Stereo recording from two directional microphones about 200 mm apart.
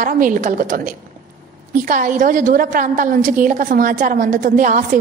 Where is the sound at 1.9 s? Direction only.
40° right (ahead or behind).